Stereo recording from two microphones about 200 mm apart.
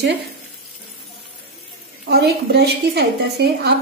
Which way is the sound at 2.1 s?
55° right (ahead or behind).